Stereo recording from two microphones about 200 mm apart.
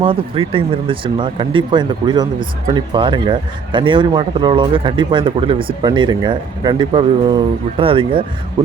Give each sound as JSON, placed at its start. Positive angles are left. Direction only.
{"t": 0.0, "sound": "speech", "side_deg": -25}